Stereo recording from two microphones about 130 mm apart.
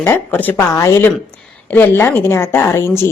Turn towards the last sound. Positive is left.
turn(degrees=20)  # may be behind; listen again after turning